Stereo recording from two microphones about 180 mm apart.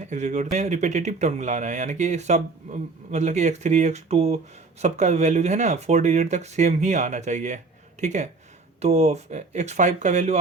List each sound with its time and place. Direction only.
0.1 s speech: 40° right (ahead or behind)